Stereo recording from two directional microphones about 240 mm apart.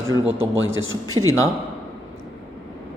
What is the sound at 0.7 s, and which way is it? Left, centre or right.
Speech, right.